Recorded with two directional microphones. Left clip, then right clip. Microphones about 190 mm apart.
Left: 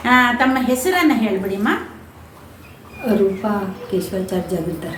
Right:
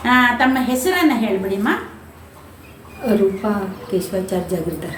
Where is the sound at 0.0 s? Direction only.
15° left (ahead or behind).